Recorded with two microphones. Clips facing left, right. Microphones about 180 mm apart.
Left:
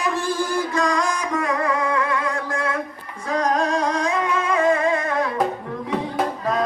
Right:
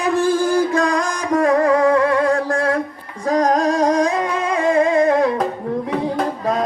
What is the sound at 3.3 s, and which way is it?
Music, 35° right (ahead or behind).